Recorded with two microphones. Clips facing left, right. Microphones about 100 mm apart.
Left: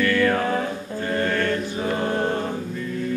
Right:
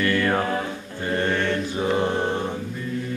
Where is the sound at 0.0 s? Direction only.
20° right (ahead or behind).